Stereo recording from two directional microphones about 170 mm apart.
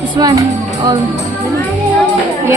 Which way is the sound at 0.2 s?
20° right (ahead or behind).